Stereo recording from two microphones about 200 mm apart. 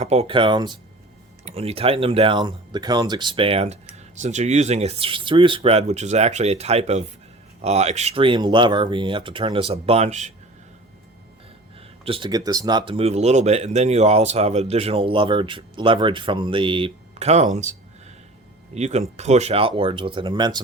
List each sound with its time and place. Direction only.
0.0 s speech: 30° right (ahead or behind)
12.0 s speech: 25° right (ahead or behind)